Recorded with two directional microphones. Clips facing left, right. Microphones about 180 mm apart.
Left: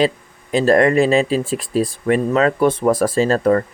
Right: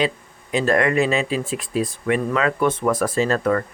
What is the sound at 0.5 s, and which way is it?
Speech, 35° left (ahead or behind).